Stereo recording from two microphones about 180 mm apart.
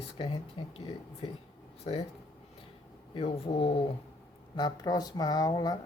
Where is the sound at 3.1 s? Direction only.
30° left (ahead or behind).